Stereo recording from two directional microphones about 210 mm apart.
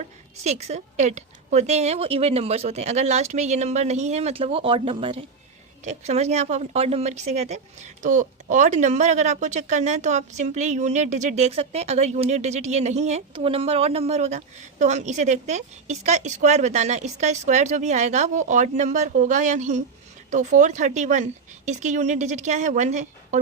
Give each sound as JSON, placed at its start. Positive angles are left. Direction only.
{"t": 0.0, "sound": "a woman's voice", "side_deg": -30}